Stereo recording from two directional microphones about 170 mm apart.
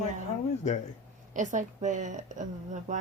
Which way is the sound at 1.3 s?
45° right (ahead or behind).